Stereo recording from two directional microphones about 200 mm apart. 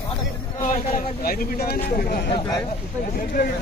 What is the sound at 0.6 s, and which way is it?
Speech, 45° left (ahead or behind).